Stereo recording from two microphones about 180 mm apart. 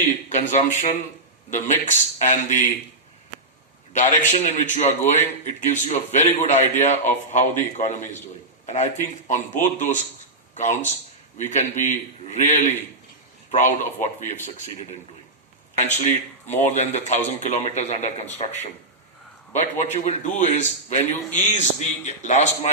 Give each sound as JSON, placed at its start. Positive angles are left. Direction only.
{"t": 0.3, "sound": "a man's voice", "side_deg": 40}
{"t": 4.3, "sound": "a man's voice", "side_deg": 40}
{"t": 15.8, "sound": "a man's voice", "side_deg": 40}
{"t": 19.5, "sound": "a man's voice", "side_deg": 40}